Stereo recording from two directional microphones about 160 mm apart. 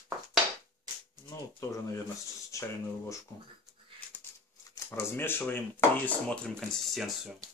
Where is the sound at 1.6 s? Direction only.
20° left (ahead or behind).